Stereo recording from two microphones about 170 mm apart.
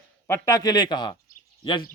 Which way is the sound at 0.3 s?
20° left (ahead or behind).